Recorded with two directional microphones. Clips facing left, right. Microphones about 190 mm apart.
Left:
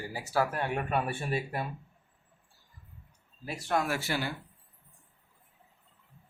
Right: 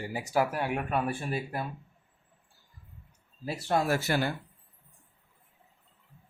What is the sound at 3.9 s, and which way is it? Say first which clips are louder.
Speech: right 4 dB; 45° right (ahead or behind).